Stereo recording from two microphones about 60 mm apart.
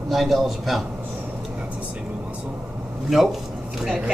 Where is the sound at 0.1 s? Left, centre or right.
Centre.